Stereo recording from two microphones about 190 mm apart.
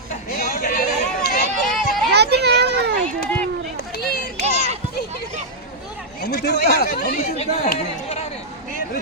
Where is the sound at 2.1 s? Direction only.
60° right (ahead or behind).